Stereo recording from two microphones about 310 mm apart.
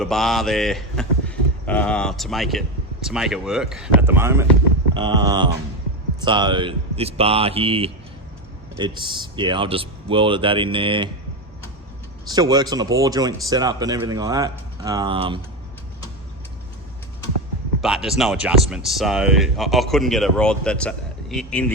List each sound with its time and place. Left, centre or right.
0.0 s speech: centre
12.3 s speech: centre
17.7 s speech: centre